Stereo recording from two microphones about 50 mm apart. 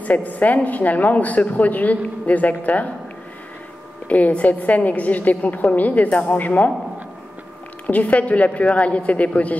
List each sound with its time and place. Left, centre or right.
0.0 s speech: left
4.1 s speech: left
7.8 s a woman's voice: left